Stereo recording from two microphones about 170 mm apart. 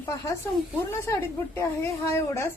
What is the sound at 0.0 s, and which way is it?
Speech, 20° left (ahead or behind).